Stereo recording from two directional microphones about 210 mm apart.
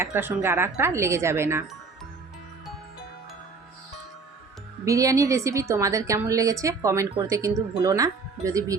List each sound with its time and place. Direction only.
0.0 s a woman's voice: 10° right (ahead or behind)
4.9 s a woman's voice: 15° right (ahead or behind)